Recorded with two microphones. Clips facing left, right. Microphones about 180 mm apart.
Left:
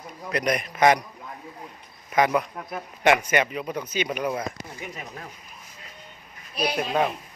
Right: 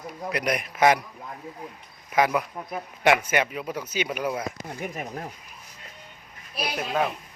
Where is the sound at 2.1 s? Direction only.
5° right (ahead or behind).